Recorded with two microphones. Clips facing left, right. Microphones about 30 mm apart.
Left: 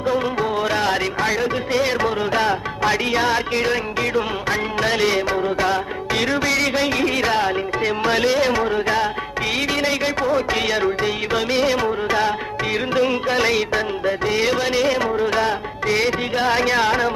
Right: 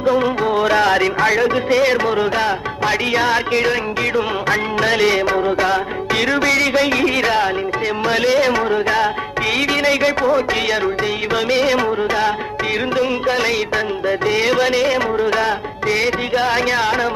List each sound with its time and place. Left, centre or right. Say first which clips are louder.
0.1 s music: right 4 dB; right
1.3 s music: right 5 dB; right
2.0 s music: right 3 dB; right
2.3 s music: right 1 dB; right
3.1 s music: right 3 dB; right
9.8 s a man's voice: right 5 dB; right
10.2 s music: right 3 dB; right
13.2 s music: right 1 dB; centre
14.3 s music: right 5 dB; right
16.3 s music: right 1 dB; centre